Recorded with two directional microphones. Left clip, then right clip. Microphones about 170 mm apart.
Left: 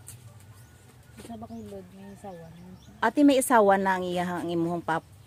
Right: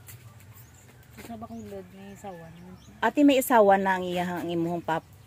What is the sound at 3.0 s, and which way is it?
A woman's voice, centre (ahead or behind).